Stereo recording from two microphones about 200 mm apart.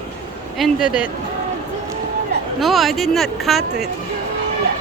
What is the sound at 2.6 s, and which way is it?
Speech, centre (ahead or behind).